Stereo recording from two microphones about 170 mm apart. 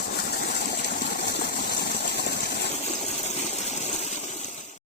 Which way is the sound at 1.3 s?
75° left (ahead or behind).